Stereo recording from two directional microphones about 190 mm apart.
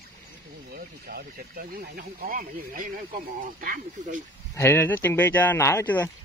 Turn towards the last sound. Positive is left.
turn(degrees=10)  # may be behind; listen again after turning